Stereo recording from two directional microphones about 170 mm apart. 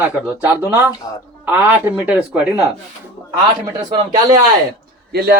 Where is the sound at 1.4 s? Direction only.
10° right (ahead or behind).